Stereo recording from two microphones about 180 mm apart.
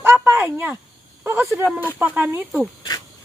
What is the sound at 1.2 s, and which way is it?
Speech, 10° right (ahead or behind).